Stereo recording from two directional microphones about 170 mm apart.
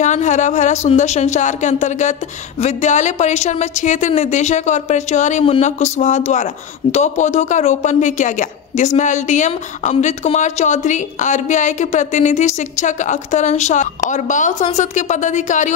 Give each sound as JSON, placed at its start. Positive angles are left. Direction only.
{"t": 0.0, "sound": "a woman's voice", "side_deg": 45}